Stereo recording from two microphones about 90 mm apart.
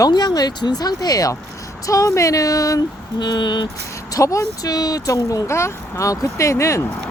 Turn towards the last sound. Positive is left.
turn(degrees=35)  # may be behind; listen again after turning